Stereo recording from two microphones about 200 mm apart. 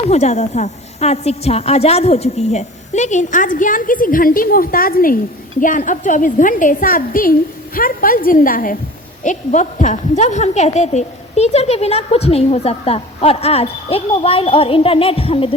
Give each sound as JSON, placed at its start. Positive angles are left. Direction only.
{"t": 0.1, "sound": "a woman's voice", "side_deg": 35}